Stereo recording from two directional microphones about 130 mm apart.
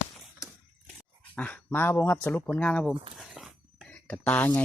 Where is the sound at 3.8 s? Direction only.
10° left (ahead or behind).